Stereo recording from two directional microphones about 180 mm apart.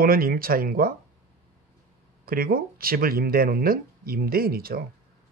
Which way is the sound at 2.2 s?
55° right (ahead or behind).